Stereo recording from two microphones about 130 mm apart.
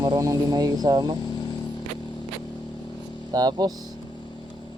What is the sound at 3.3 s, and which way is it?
Speech, 30° right (ahead or behind).